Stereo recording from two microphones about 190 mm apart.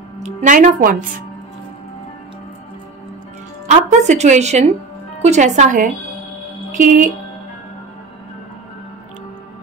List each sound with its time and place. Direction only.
0.2 s a woman's voice: 40° right (ahead or behind)
3.6 s a woman's voice: 35° right (ahead or behind)